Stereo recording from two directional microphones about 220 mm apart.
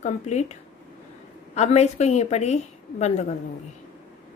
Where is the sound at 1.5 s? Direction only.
30° left (ahead or behind).